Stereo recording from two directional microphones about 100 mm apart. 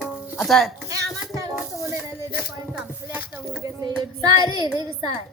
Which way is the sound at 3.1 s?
20° right (ahead or behind).